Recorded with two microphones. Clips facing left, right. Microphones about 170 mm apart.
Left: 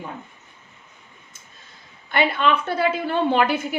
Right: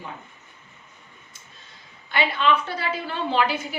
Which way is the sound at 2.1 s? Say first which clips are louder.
Left 2 dB; 55° left (ahead or behind).